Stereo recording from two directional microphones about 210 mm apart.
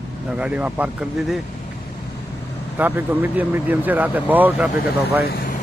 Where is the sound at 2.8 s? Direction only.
10° right (ahead or behind).